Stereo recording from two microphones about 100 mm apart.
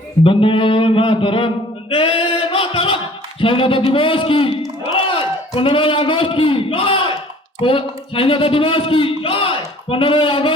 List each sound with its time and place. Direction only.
0.3 s a man's voice: 60° left (ahead or behind)
1.9 s singing: 65° left (ahead or behind)
3.4 s a man's voice: 60° left (ahead or behind)